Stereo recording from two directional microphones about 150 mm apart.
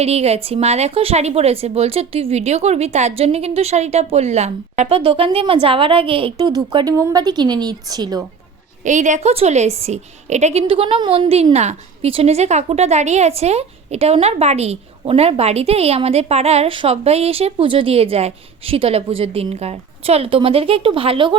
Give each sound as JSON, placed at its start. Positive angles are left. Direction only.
{"t": 0.0, "sound": "a woman's voice", "side_deg": -45}
{"t": 8.8, "sound": "a woman's voice", "side_deg": -55}